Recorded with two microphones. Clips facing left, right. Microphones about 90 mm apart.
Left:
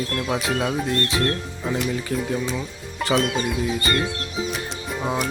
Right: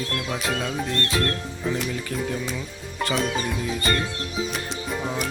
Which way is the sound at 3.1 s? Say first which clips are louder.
Left 5 dB; centre (ahead or behind).